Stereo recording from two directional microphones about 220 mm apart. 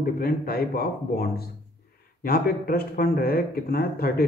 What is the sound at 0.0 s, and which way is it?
Speech, 45° left (ahead or behind).